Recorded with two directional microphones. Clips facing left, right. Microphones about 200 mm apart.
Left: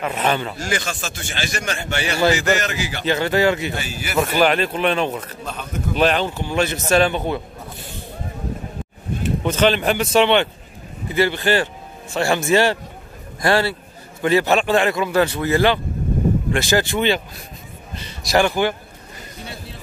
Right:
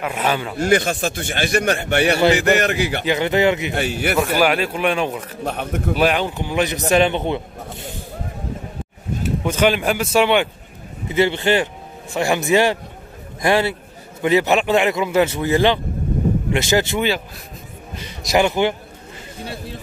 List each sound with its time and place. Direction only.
0.0 s a man's voice: 10° right (ahead or behind)
0.6 s speech: 55° right (ahead or behind)
3.1 s a man's voice: 20° right (ahead or behind)
3.7 s speech: 60° right (ahead or behind)
4.2 s a man's voice: 10° right (ahead or behind)
5.4 s speech: 65° right (ahead or behind)
5.9 s a man's voice: 10° right (ahead or behind)
9.2 s a man's voice: 10° right (ahead or behind)
11.1 s a man's voice: 20° right (ahead or behind)